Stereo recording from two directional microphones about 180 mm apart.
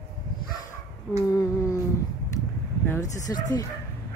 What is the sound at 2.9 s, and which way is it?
Speech, 20° left (ahead or behind).